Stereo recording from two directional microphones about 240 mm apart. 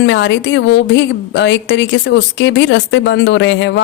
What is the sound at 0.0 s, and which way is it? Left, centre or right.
Speech, left.